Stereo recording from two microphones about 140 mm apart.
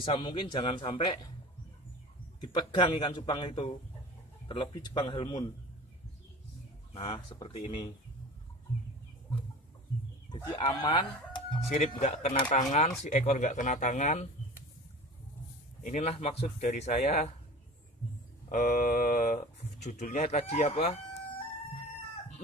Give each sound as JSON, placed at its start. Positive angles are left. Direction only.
{"t": 0.2, "sound": "speech", "side_deg": 35}
{"t": 2.5, "sound": "speech", "side_deg": 35}
{"t": 6.9, "sound": "speech", "side_deg": 40}
{"t": 10.3, "sound": "speech", "side_deg": 30}
{"t": 12.0, "sound": "speech", "side_deg": 55}
{"t": 12.5, "sound": "speech", "side_deg": 65}
{"t": 13.0, "sound": "speech", "side_deg": 55}
{"t": 15.8, "sound": "speech", "side_deg": 60}
{"t": 18.5, "sound": "speech", "side_deg": 80}